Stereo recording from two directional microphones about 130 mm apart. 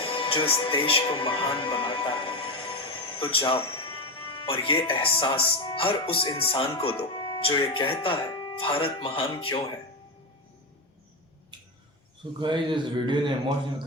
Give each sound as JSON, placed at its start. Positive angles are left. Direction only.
{"t": 0.0, "sound": "speech", "side_deg": 45}
{"t": 12.4, "sound": "a man's voice", "side_deg": -40}